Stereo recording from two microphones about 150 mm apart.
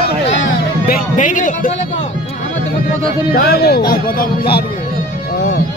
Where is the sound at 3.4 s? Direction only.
90° left.